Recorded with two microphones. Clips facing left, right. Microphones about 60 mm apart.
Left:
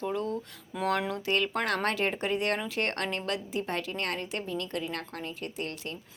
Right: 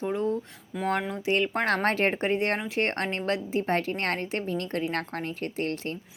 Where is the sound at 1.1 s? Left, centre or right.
Right.